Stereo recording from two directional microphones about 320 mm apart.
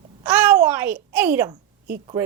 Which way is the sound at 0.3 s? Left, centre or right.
Centre.